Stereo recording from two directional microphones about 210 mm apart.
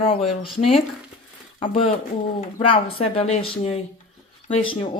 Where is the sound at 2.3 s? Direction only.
25° left (ahead or behind).